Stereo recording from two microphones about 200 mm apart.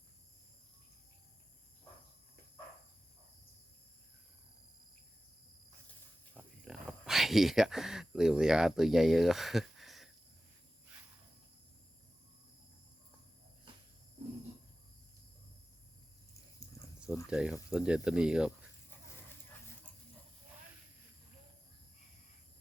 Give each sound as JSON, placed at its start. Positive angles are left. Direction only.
{"t": 6.3, "sound": "speech", "side_deg": -5}
{"t": 17.2, "sound": "speech", "side_deg": -5}